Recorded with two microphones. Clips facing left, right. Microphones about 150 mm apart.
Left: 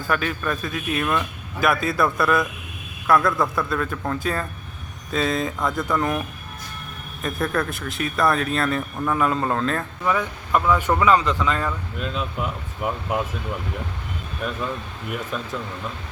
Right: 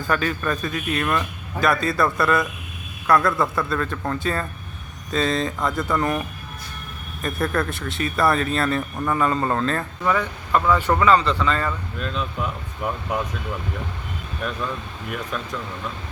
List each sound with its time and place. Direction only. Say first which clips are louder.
0.1 s speech: right 1 dB; 5° left (ahead or behind)